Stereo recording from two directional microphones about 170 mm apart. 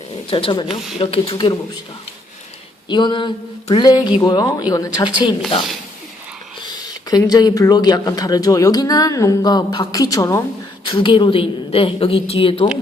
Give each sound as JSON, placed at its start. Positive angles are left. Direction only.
{"t": 0.1, "sound": "speech", "side_deg": 30}
{"t": 0.7, "sound": "speech", "side_deg": 0}
{"t": 0.9, "sound": "a woman's voice", "side_deg": 35}
{"t": 2.9, "sound": "speech", "side_deg": 25}
{"t": 6.6, "sound": "a woman's voice", "side_deg": 25}